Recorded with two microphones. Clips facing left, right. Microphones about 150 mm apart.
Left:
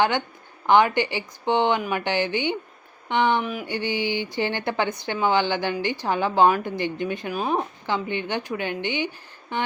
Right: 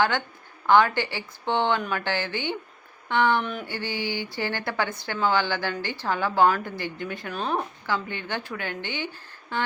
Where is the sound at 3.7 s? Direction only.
20° left (ahead or behind).